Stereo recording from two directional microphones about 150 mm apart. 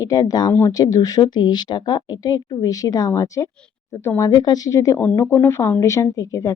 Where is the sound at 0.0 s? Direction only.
25° left (ahead or behind).